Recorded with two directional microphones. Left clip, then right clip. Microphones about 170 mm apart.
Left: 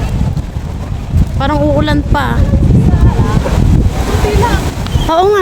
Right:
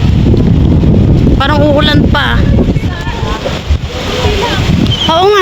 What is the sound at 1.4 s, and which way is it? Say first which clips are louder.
Speech: right 2 dB; centre (ahead or behind).